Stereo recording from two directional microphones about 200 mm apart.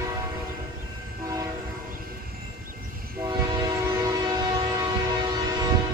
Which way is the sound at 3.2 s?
20° right (ahead or behind).